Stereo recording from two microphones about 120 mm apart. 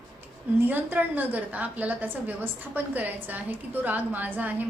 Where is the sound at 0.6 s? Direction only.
15° right (ahead or behind).